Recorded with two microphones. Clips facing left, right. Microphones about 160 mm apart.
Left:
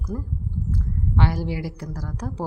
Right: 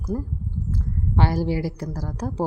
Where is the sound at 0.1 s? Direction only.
35° right (ahead or behind).